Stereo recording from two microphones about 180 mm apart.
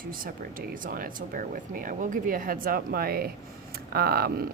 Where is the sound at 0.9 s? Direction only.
50° right (ahead or behind).